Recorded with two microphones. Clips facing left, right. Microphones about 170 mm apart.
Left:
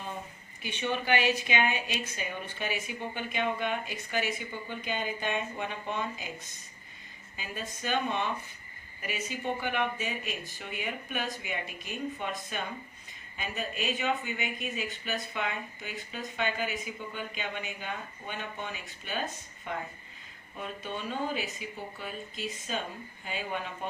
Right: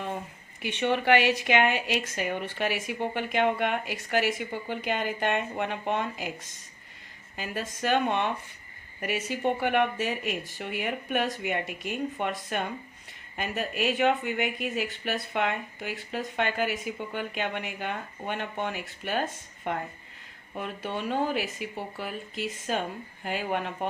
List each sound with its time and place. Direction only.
0.6 s speech: 80° right; by 23.7 s 65° right (ahead or behind)